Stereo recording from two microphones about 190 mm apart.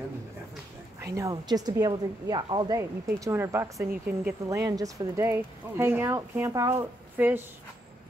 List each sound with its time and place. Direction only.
1.0 s speech: 15° right (ahead or behind)